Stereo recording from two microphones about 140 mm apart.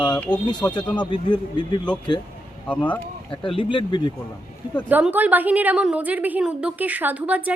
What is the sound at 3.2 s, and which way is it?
Speech, 35° left (ahead or behind).